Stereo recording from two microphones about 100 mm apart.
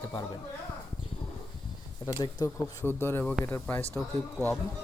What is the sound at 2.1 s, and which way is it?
Speech, 45° left (ahead or behind).